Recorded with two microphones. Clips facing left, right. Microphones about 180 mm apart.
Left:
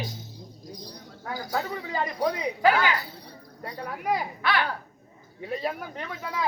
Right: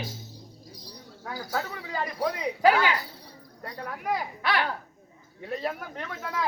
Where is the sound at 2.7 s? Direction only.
10° right (ahead or behind).